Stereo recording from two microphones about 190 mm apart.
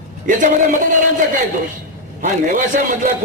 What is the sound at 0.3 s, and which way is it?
A man's voice, 45° right (ahead or behind).